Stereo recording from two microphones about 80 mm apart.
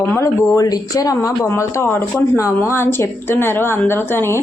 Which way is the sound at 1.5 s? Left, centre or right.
Left.